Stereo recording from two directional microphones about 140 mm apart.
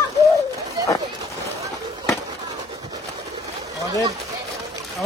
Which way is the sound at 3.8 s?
25° right (ahead or behind).